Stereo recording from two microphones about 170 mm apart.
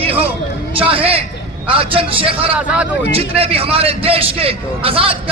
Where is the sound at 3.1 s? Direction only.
35° right (ahead or behind).